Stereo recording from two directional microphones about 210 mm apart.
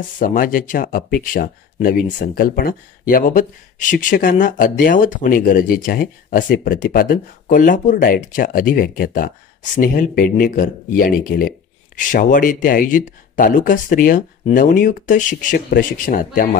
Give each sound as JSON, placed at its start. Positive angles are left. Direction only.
{"t": 0.2, "sound": "speech", "side_deg": 40}